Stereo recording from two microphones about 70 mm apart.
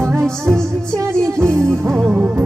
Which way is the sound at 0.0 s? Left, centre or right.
Right.